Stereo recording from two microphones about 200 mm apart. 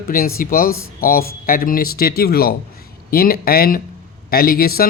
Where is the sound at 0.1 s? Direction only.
45° left (ahead or behind).